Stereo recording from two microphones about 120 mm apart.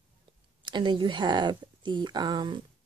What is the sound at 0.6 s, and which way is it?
Speech, 40° right (ahead or behind).